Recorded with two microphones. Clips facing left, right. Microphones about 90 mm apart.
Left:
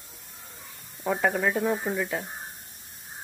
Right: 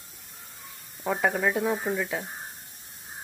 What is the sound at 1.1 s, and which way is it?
Speech, centre (ahead or behind).